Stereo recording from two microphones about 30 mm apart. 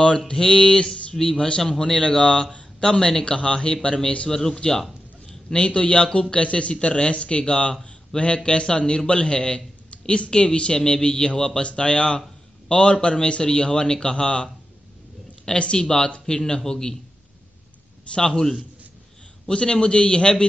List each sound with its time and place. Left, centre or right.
0.3 s a man's voice: left
1.2 s a man's voice: left
3.3 s a man's voice: left
3.5 s a man's voice: left
4.3 s speech: centre
5.5 s a man's voice: left
15.5 s a man's voice: left
18.1 s a man's voice: left
19.5 s a man's voice: left